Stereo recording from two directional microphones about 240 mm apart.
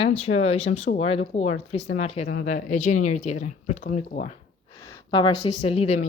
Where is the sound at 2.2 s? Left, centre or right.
Left.